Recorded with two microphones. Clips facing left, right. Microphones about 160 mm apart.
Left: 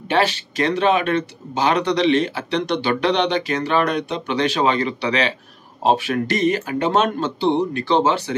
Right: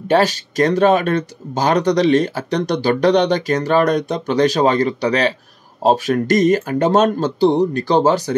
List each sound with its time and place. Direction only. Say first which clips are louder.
0.1 s speech: right 4 dB; 40° right (ahead or behind)